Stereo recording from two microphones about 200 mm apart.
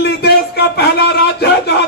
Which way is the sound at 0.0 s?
55° left (ahead or behind).